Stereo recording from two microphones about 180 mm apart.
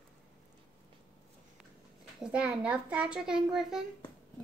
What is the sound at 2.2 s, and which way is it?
A child's voice, 5° right (ahead or behind).